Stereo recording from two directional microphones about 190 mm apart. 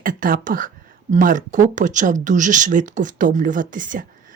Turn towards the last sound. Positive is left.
turn(degrees=-45)  # may be behind; listen again after turning